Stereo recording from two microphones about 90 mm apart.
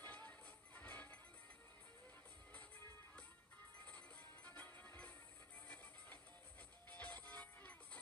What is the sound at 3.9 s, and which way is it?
Music, 15° left (ahead or behind).